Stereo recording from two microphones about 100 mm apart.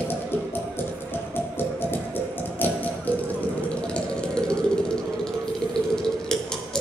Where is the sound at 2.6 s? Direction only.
15° left (ahead or behind).